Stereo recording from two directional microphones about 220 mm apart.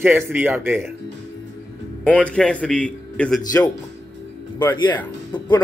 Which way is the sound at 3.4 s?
15° left (ahead or behind).